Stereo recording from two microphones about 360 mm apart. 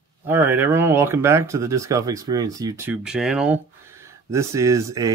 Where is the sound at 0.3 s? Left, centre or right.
Centre.